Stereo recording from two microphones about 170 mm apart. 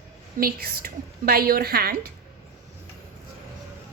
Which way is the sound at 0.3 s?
60° right (ahead or behind).